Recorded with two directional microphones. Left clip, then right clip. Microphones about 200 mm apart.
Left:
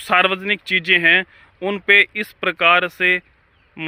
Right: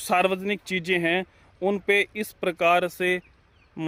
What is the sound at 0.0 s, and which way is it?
A man's voice, 10° right (ahead or behind).